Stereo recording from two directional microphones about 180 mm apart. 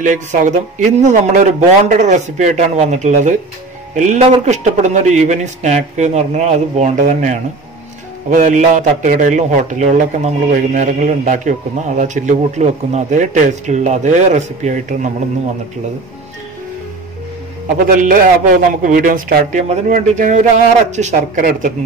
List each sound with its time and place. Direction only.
0.0 s a man's voice: 45° right (ahead or behind)
18.4 s a man's voice: 50° right (ahead or behind)